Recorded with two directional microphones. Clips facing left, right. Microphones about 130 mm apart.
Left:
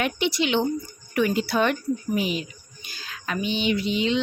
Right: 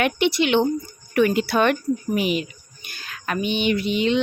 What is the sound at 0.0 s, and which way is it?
Speech, 60° right (ahead or behind).